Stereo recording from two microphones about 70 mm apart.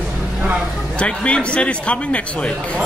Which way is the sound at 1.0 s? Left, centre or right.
Centre.